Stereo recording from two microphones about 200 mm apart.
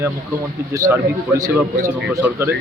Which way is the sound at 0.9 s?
15° right (ahead or behind).